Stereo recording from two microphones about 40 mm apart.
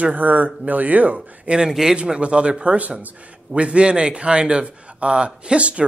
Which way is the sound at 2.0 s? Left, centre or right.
Right.